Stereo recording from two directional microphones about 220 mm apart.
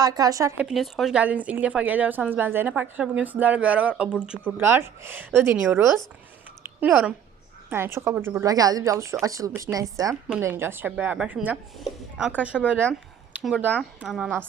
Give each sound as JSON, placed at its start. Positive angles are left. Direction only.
{"t": 0.0, "sound": "a woman's voice", "side_deg": -15}
{"t": 6.6, "sound": "a sound", "side_deg": -10}
{"t": 7.7, "sound": "a woman's voice", "side_deg": -10}